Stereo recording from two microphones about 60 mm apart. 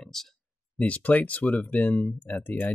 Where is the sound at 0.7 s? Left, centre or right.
Left.